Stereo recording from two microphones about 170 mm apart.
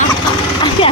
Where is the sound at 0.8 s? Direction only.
30° left (ahead or behind).